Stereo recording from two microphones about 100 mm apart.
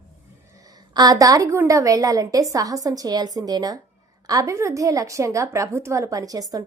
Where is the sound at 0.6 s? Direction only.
40° right (ahead or behind).